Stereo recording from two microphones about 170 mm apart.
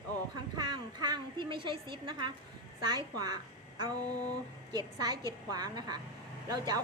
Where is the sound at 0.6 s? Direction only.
25° right (ahead or behind).